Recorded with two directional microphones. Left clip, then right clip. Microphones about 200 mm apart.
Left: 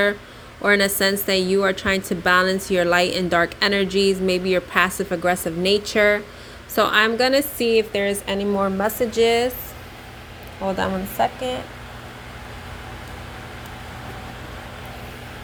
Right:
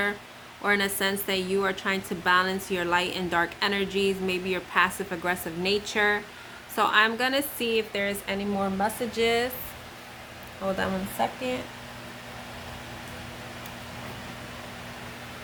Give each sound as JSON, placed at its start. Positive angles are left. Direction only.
{"t": 0.6, "sound": "speech", "side_deg": 25}
{"t": 10.8, "sound": "speech", "side_deg": 10}